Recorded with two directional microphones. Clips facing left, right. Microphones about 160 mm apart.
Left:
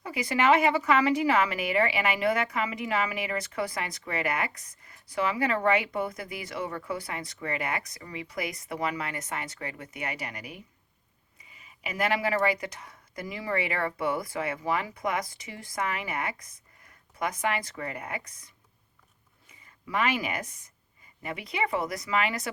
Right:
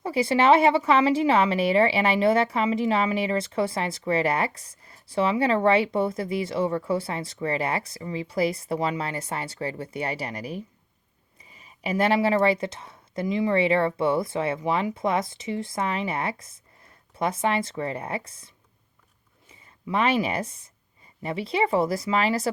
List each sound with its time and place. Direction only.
0.0 s speech: 30° right (ahead or behind)